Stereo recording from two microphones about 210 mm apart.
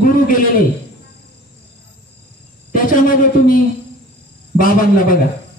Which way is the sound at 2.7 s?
40° left (ahead or behind).